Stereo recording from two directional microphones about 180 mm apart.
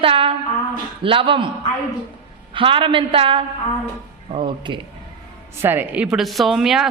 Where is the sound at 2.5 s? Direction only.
30° right (ahead or behind).